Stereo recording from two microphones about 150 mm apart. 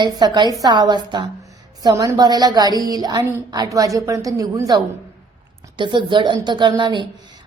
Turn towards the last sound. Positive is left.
turn(degrees=-30)  # may be behind; listen again after turning